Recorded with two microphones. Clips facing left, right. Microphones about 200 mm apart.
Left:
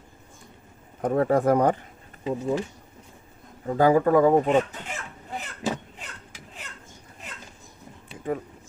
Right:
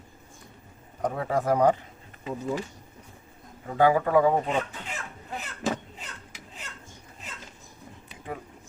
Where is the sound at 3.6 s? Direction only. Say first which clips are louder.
Left 3 dB; 40° left (ahead or behind).